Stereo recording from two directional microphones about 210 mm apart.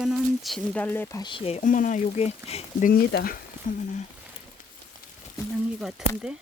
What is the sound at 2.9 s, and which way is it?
Speech, 45° left (ahead or behind).